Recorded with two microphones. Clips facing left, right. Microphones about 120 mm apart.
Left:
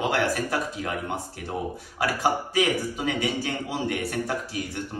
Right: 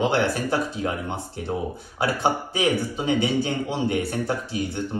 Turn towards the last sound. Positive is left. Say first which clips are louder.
# right 3 dB
turn(degrees=-25)  # may be behind; listen again after turning